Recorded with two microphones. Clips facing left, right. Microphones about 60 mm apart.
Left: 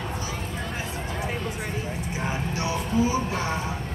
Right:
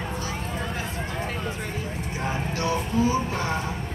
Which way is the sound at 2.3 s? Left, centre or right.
Centre.